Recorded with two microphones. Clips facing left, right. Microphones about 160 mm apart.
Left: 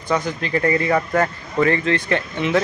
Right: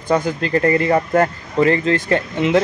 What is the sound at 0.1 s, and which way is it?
Speech, 35° right (ahead or behind).